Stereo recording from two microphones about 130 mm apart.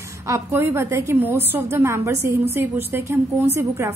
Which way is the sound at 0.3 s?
20° right (ahead or behind).